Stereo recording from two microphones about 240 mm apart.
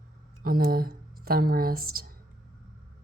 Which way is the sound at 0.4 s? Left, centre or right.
Right.